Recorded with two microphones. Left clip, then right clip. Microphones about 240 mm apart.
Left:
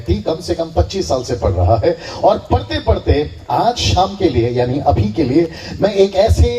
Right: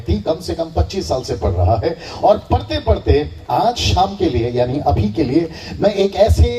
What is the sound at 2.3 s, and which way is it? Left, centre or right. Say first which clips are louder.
Speech: right 1 dB; right.